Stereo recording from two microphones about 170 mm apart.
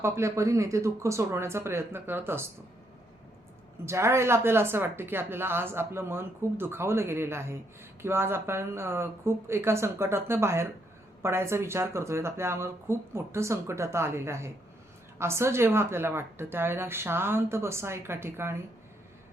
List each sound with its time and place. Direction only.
0.0 s speech: 15° right (ahead or behind)
3.8 s speech: 15° right (ahead or behind)